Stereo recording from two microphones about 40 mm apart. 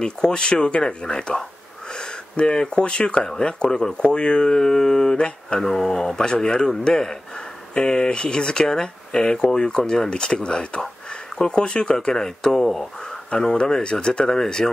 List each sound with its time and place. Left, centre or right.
0.0 s speech: centre
5.6 s speech: centre